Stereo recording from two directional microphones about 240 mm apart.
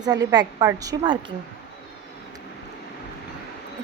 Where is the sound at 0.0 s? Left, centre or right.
Centre.